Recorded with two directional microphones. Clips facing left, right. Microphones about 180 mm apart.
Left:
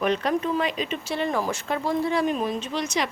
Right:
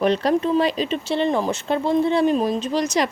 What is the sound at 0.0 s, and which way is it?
A woman's voice, 35° right (ahead or behind).